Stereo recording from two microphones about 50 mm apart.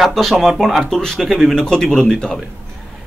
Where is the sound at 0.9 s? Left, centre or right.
Centre.